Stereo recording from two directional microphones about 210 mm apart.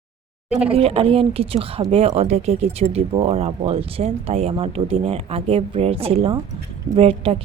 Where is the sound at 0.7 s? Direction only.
25° right (ahead or behind).